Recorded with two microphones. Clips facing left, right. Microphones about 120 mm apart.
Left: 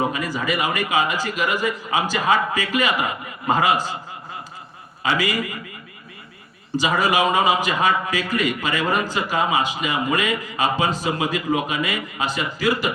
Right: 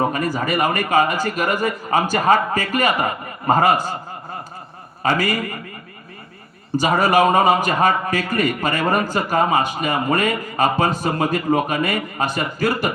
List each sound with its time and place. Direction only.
0.0 s a man's voice: 50° right (ahead or behind)
5.0 s a man's voice: 50° right (ahead or behind)
6.7 s a man's voice: 50° right (ahead or behind)